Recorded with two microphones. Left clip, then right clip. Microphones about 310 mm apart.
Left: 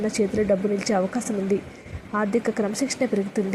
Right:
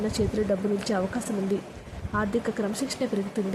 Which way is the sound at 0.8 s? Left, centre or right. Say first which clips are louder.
Left 5 dB; centre.